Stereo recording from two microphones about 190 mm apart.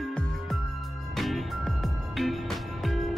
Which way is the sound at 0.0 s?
Centre (ahead or behind).